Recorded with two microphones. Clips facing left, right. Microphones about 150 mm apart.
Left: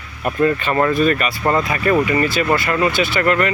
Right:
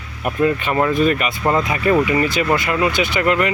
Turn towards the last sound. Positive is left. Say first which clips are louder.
# even
turn(degrees=-15)  # may be behind; listen again after turning